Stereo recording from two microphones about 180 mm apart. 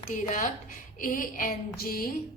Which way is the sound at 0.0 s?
45° left (ahead or behind).